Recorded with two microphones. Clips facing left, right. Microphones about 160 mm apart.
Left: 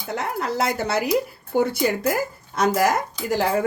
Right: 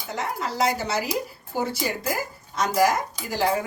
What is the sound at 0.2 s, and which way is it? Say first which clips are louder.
Speech: left 1 dB; 55° left (ahead or behind).